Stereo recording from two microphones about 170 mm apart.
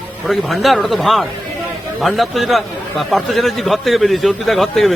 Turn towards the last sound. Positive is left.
turn(degrees=0)  # may be behind; listen again after turning